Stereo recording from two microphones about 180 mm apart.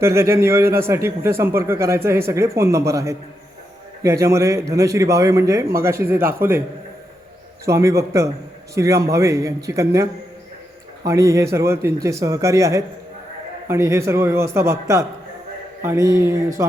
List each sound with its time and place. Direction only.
0.0 s a man's voice: 15° right (ahead or behind)
7.6 s a man's voice: 15° right (ahead or behind)